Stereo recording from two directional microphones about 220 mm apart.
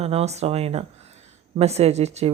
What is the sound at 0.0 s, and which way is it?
A woman's voice, 30° right (ahead or behind).